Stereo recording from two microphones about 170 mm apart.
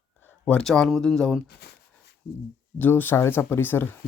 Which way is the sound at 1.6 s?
75° left (ahead or behind).